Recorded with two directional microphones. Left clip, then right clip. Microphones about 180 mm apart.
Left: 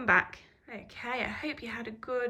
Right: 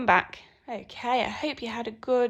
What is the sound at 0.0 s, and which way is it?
A woman's voice, 10° right (ahead or behind).